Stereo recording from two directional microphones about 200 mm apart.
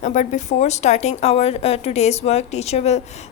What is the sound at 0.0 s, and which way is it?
A woman's voice, 40° left (ahead or behind).